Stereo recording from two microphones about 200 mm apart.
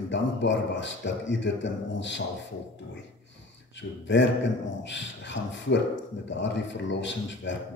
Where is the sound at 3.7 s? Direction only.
65° left (ahead or behind).